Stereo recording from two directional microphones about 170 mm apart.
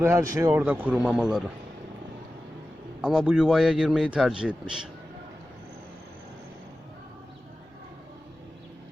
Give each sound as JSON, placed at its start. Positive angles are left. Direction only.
{"t": 0.0, "sound": "a man's voice", "side_deg": -15}
{"t": 3.0, "sound": "a man's voice", "side_deg": -5}